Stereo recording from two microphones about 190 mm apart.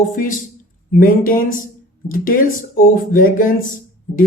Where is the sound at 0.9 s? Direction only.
45° left (ahead or behind).